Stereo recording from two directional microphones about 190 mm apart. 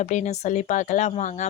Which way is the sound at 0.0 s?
40° left (ahead or behind).